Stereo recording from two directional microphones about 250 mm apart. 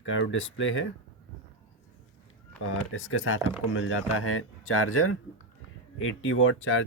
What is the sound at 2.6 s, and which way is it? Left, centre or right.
Speech, left.